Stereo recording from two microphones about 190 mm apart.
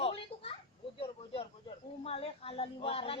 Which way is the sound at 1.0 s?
30° left (ahead or behind).